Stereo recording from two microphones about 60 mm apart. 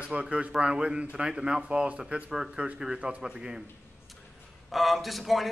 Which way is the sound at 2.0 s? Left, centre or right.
Centre.